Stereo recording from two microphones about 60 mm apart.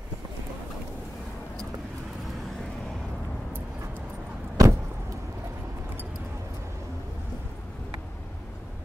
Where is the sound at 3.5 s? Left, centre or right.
Right.